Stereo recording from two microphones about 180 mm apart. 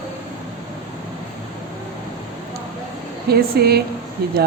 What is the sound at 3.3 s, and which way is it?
Speech, 60° right (ahead or behind).